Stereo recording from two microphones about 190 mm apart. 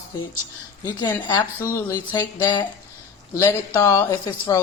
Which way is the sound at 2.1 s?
25° left (ahead or behind).